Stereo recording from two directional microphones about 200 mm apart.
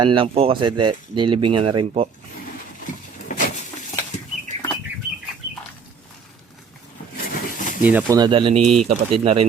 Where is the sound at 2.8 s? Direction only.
40° left (ahead or behind).